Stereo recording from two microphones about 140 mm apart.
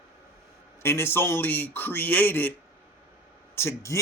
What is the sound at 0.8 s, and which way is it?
A man's voice, 15° left (ahead or behind).